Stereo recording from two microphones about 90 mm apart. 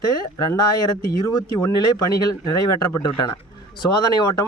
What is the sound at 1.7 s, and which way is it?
Speech, 40° left (ahead or behind).